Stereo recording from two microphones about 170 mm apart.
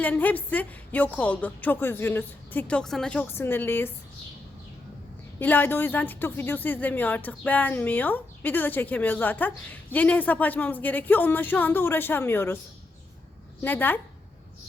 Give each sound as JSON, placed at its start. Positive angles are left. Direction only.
{"t": 0.0, "sound": "speech", "side_deg": 10}
{"t": 5.4, "sound": "speech", "side_deg": 10}
{"t": 13.6, "sound": "speech", "side_deg": 10}